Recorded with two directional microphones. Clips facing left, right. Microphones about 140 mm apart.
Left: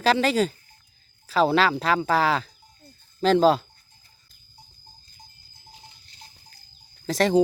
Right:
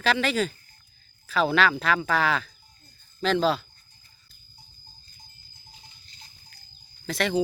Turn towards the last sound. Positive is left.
turn(degrees=40)  # may be behind; listen again after turning